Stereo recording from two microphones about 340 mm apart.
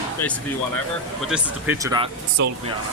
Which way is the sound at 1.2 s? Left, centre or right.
Centre.